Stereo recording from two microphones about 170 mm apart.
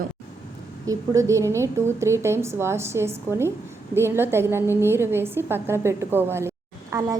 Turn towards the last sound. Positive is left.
turn(degrees=-20)  # may be behind; listen again after turning